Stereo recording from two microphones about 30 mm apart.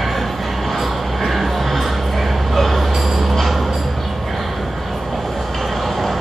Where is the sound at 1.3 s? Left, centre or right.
Centre.